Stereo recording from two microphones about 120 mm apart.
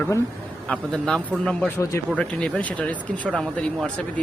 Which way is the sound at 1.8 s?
25° left (ahead or behind).